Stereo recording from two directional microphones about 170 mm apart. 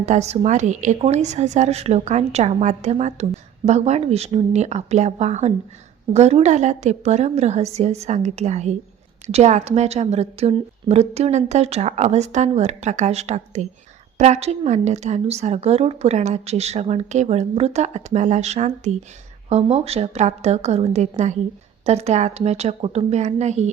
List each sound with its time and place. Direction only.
0.0 s a woman's voice: 40° right (ahead or behind)